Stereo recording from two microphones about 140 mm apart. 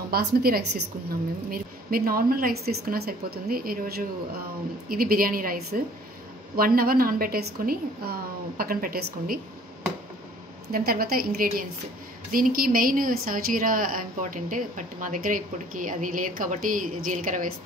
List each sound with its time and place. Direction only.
0.1 s a woman's voice: 90° right
10.7 s a woman's voice: 90° right; by 17.6 s 75° right (ahead or behind)